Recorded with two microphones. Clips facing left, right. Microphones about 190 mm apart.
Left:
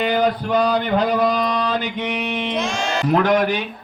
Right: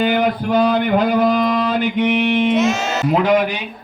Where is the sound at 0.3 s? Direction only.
5° right (ahead or behind).